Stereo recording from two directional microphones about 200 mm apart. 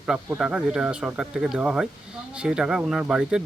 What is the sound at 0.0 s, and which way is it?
Speech, 5° right (ahead or behind).